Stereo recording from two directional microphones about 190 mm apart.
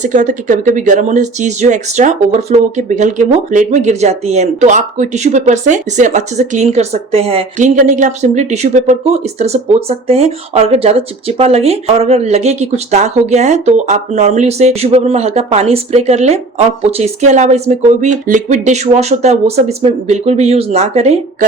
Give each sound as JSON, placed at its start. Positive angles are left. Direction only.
{"t": 0.0, "sound": "speech", "side_deg": -40}